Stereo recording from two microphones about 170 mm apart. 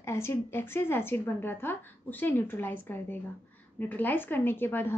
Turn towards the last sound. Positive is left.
turn(degrees=10)  # may be behind; listen again after turning